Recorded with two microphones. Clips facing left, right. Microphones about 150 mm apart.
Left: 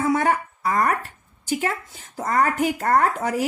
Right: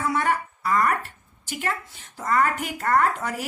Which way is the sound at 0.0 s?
45° left (ahead or behind).